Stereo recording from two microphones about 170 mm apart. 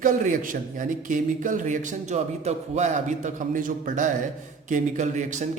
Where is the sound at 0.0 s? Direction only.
50° right (ahead or behind).